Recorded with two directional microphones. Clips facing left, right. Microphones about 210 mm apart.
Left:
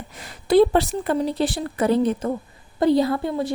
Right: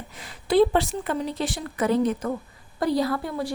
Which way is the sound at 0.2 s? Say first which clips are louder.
Left 3 dB; 45° left (ahead or behind).